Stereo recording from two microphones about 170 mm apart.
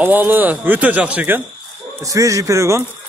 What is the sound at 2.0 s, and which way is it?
Speech, 20° right (ahead or behind).